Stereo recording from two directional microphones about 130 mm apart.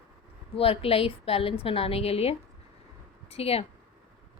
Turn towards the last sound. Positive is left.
turn(degrees=50)  # may be behind; listen again after turning